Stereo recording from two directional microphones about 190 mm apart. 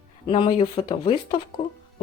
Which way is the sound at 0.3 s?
25° left (ahead or behind).